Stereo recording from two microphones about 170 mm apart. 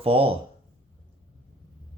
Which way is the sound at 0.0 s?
35° right (ahead or behind).